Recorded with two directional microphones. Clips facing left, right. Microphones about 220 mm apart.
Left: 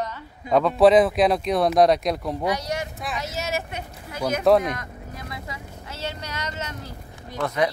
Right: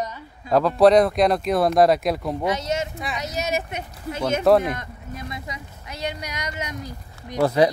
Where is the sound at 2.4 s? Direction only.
25° right (ahead or behind).